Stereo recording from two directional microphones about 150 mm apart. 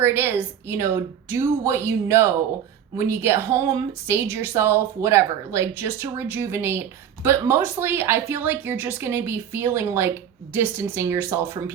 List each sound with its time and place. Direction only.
0.0 s speech: 15° right (ahead or behind)